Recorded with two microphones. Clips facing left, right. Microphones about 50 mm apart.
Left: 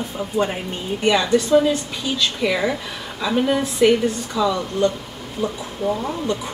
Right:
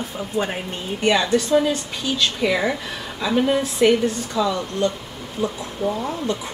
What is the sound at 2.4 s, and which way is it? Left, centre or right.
Speech, centre.